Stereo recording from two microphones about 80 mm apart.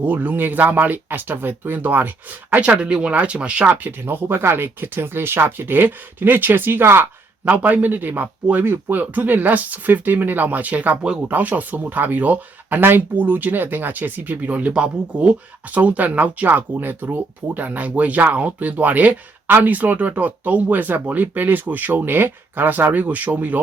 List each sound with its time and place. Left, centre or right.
0.0 s speech: right